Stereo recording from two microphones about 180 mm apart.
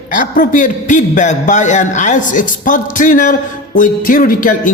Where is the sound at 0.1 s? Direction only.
45° left (ahead or behind).